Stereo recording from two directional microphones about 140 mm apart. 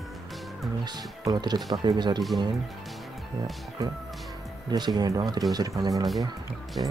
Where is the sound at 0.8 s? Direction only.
30° right (ahead or behind).